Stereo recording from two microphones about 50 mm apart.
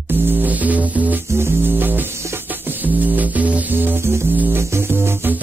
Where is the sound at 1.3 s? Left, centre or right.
Right.